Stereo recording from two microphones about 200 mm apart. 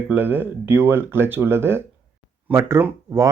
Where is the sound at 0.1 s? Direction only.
10° right (ahead or behind).